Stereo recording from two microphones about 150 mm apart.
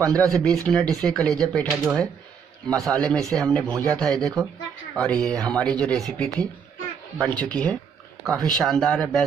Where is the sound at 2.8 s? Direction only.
5° left (ahead or behind).